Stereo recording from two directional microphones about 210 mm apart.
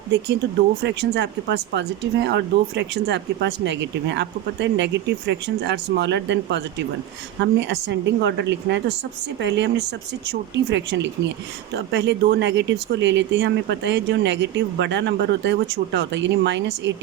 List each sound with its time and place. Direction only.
0.8 s speech: 55° right (ahead or behind)